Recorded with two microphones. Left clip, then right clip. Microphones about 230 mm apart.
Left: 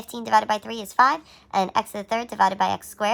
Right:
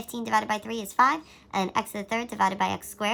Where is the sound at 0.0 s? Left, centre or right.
Centre.